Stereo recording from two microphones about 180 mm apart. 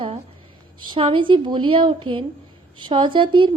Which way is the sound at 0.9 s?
30° right (ahead or behind).